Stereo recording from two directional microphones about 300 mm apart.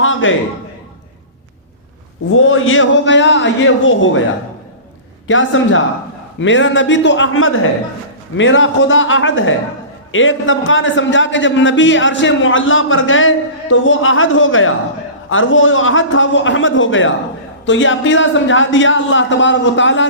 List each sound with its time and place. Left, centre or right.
0.0 s a sound: left
2.4 s a man's voice: left
5.3 s a man's voice: left